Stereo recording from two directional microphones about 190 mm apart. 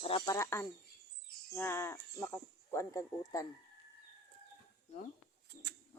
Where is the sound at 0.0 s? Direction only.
30° left (ahead or behind).